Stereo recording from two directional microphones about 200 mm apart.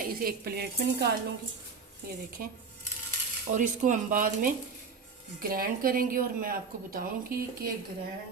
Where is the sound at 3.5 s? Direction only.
40° right (ahead or behind).